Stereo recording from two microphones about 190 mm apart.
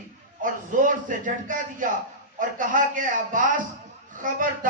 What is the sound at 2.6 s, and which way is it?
A man's voice, 45° right (ahead or behind).